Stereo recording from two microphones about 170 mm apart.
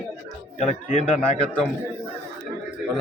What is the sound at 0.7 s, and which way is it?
Speech, 45° left (ahead or behind).